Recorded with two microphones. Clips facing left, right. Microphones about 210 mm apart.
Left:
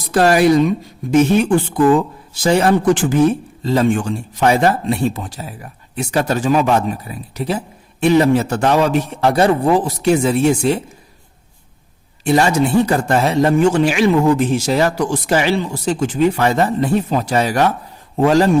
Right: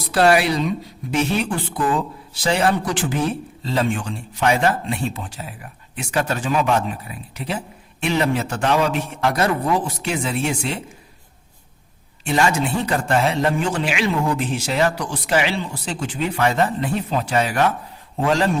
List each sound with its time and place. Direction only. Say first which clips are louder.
0.1 s speech: left 5 dB; 45° left (ahead or behind)
9.3 s speech: left 7 dB; 30° left (ahead or behind)
12.2 s speech: left 5 dB; 40° left (ahead or behind)